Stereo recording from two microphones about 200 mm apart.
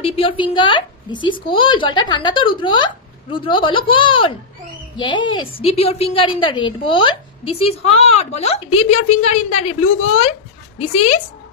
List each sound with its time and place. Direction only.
0.0 s a woman's voice: 30° left (ahead or behind)